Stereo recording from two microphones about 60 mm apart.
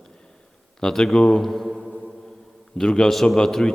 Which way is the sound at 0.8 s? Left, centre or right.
Centre.